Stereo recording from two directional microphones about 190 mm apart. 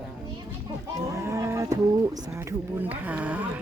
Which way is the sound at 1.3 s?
15° right (ahead or behind).